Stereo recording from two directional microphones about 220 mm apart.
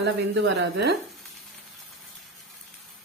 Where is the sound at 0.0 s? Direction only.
55° right (ahead or behind).